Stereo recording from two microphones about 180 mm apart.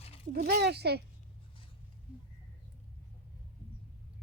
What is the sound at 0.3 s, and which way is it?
Speech, 60° right (ahead or behind).